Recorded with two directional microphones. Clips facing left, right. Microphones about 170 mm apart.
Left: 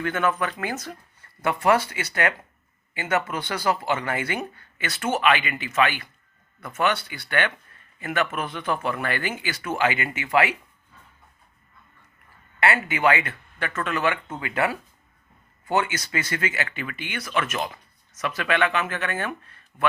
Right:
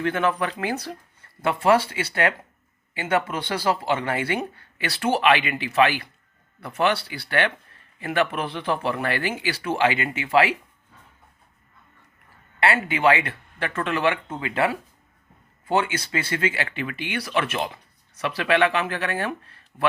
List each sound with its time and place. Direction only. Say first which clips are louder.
0.0 s speech: right 1 dB; 30° right (ahead or behind)
12.5 s speech: right 1 dB; 30° right (ahead or behind)